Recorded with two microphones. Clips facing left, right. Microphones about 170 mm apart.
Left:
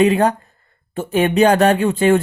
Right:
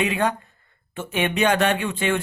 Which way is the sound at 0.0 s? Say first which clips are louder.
Left 8 dB; 40° left (ahead or behind).